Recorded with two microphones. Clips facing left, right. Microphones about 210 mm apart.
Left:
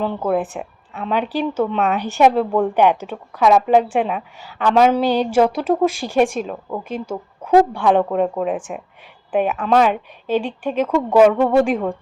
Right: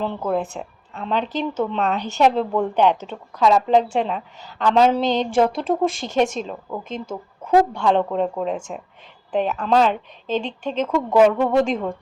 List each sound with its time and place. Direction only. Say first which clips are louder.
0.3 s a woman's voice: left 3 dB; 15° left (ahead or behind)